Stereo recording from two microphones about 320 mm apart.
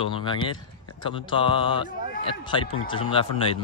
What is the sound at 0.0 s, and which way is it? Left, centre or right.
Speech, centre.